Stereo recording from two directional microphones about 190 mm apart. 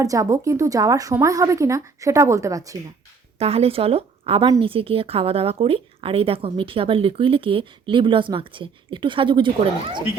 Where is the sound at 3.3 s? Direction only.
30° right (ahead or behind).